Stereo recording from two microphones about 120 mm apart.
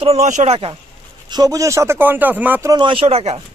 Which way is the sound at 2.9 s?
55° right (ahead or behind).